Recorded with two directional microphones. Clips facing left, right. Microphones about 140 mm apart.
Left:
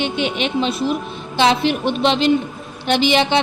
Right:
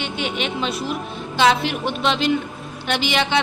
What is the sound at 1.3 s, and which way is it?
A woman's voice, 30° left (ahead or behind).